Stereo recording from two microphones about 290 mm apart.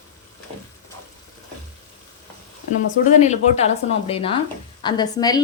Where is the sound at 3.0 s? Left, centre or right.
Left.